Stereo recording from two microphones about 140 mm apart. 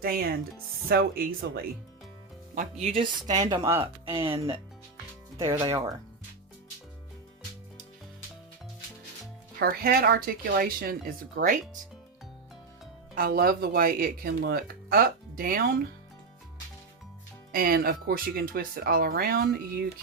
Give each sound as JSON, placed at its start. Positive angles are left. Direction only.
{"t": 0.0, "sound": "speech", "side_deg": -90}
{"t": 2.6, "sound": "speech", "side_deg": -55}
{"t": 3.3, "sound": "speech", "side_deg": -25}
{"t": 4.1, "sound": "speech", "side_deg": -40}
{"t": 5.4, "sound": "speech", "side_deg": -20}
{"t": 5.6, "sound": "speech", "side_deg": -30}
{"t": 9.6, "sound": "speech", "side_deg": -90}
{"t": 11.3, "sound": "speech", "side_deg": -70}
{"t": 13.1, "sound": "speech", "side_deg": -90}
{"t": 17.5, "sound": "speech", "side_deg": -90}